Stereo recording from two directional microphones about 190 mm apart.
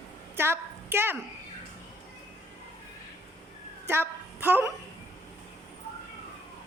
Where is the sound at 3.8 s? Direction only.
10° right (ahead or behind).